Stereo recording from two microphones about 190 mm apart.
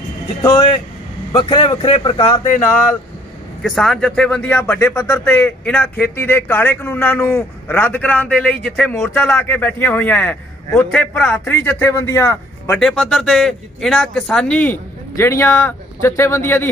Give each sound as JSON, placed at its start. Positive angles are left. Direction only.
{"t": 0.4, "sound": "speech", "side_deg": 20}
{"t": 3.6, "sound": "speech", "side_deg": 0}
{"t": 12.7, "sound": "a man's voice", "side_deg": 0}